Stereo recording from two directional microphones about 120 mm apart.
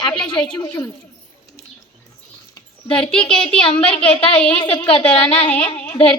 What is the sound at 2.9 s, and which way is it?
Speech, 10° left (ahead or behind).